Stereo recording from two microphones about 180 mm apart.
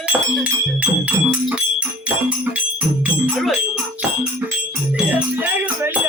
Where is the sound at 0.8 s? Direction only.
10° right (ahead or behind).